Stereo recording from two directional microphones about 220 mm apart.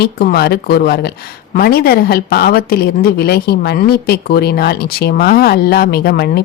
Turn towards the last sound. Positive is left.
turn(degrees=45)  # may be behind; listen again after turning